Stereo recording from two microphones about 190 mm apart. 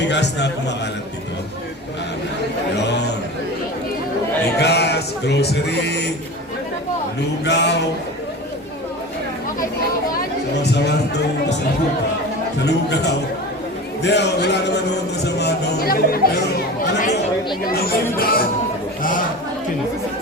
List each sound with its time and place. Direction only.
0.0 s a man's voice: 65° left (ahead or behind)
4.6 s speech: 60° left (ahead or behind)
7.4 s speech: 65° left (ahead or behind)
10.6 s speech: 60° left (ahead or behind)
12.5 s speech: 60° left (ahead or behind)
17.7 s speech: 50° left (ahead or behind)